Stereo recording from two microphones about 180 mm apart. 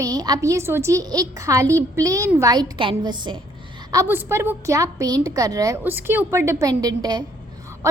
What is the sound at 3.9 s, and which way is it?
A woman's voice, 15° right (ahead or behind).